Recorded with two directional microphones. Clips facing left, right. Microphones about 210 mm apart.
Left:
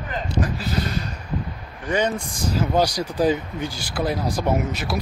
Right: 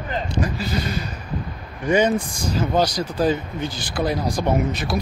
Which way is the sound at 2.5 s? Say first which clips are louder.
Even; 10° left (ahead or behind).